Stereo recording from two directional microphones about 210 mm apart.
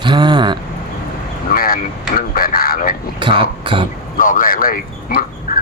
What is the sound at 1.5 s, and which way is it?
Speech, 45° left (ahead or behind).